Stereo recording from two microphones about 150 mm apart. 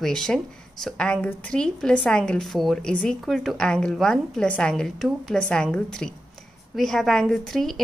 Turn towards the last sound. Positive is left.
turn(degrees=0)  # may be behind; listen again after turning